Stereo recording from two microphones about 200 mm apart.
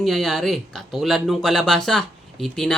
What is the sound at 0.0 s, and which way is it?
Speech, centre (ahead or behind).